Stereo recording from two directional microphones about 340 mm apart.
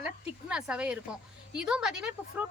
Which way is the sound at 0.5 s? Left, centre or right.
Centre.